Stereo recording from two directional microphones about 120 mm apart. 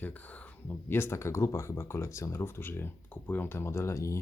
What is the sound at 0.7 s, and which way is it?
Speech, 20° left (ahead or behind).